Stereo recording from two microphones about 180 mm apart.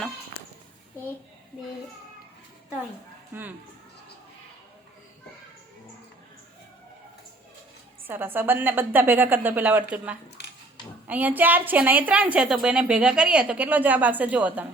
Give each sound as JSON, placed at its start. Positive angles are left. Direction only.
{"t": 3.3, "sound": "a woman's voice", "side_deg": -10}
{"t": 8.0, "sound": "a woman's voice", "side_deg": -10}
{"t": 10.4, "sound": "a sound", "side_deg": 75}
{"t": 11.1, "sound": "a woman's voice", "side_deg": -10}